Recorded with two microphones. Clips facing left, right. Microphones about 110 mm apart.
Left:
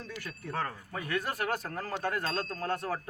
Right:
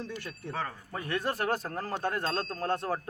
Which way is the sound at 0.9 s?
30° right (ahead or behind).